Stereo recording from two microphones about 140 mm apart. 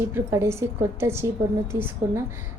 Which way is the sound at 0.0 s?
20° right (ahead or behind).